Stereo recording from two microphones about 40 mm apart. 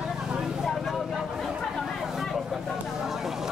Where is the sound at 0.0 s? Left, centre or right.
Centre.